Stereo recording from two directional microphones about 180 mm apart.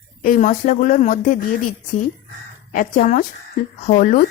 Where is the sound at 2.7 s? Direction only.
45° left (ahead or behind).